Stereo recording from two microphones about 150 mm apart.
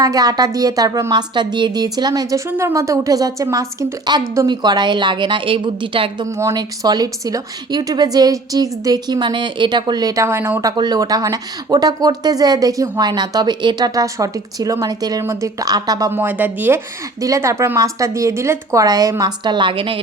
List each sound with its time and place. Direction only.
0.0 s a woman's voice: 25° right (ahead or behind)
6.2 s a woman's voice: 20° right (ahead or behind)
16.1 s a woman's voice: 10° right (ahead or behind); by 20.0 s 35° right (ahead or behind)